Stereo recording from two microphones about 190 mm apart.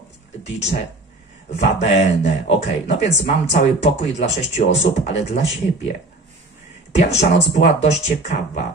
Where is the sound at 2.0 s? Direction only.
35° left (ahead or behind).